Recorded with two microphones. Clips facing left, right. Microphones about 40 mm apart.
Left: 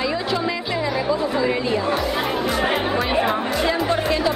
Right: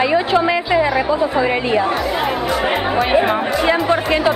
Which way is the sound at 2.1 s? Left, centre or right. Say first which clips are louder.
Right 3 dB; centre.